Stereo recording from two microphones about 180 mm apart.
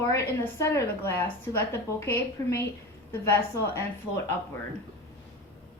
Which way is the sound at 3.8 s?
15° left (ahead or behind).